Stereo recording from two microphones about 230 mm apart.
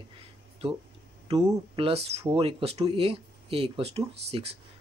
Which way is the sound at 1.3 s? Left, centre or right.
Right.